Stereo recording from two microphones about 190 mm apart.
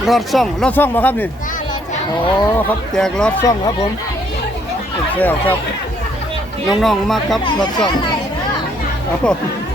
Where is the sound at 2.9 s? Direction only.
5° left (ahead or behind).